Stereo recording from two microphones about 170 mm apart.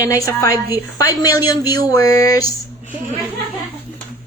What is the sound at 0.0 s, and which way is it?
A woman's voice, 20° left (ahead or behind).